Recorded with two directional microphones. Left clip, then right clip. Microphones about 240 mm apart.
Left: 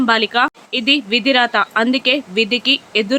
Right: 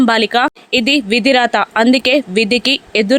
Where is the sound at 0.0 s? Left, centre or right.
Right.